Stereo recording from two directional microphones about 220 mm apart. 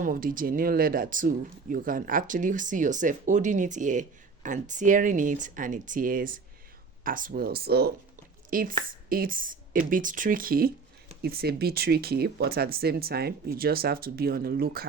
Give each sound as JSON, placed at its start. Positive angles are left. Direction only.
{"t": 0.0, "sound": "speech", "side_deg": -40}